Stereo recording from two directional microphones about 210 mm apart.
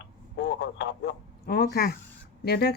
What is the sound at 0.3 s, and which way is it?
A man's voice, 55° left (ahead or behind).